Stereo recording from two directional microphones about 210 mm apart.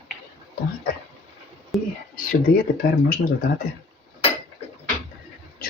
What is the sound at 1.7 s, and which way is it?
Speech, centre (ahead or behind).